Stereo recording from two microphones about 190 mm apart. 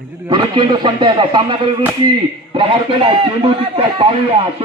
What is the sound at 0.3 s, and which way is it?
A man's voice, 25° right (ahead or behind).